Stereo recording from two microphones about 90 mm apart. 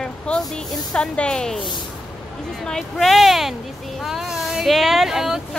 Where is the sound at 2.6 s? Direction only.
5° left (ahead or behind).